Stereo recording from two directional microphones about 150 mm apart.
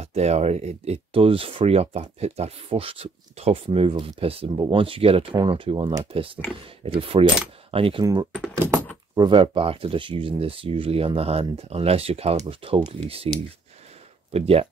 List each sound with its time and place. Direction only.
0.0 s speech: 45° right (ahead or behind)
8.0 s speech: 25° right (ahead or behind)
14.3 s speech: 40° right (ahead or behind)